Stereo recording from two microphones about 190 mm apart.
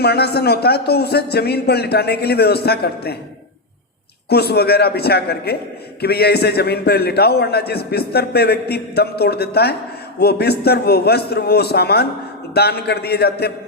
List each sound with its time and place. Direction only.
0.0 s a man's voice: 55° left (ahead or behind)
4.3 s a man's voice: 55° left (ahead or behind)